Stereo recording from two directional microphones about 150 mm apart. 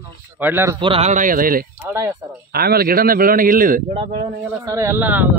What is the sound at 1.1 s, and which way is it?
Speech, 65° right (ahead or behind).